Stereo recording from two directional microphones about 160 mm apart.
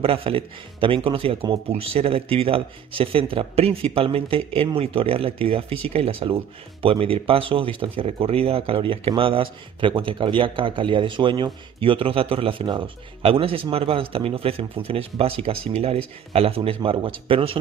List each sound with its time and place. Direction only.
0.0 s speech: 35° right (ahead or behind)